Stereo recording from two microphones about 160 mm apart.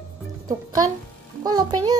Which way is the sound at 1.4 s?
25° right (ahead or behind).